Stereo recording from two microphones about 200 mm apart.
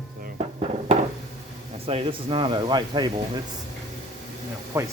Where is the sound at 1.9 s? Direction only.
25° right (ahead or behind).